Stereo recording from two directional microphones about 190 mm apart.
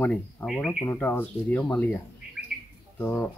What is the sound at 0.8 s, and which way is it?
Speech, 10° left (ahead or behind).